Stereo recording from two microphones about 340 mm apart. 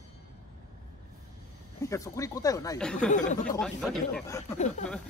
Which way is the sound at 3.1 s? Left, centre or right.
Left.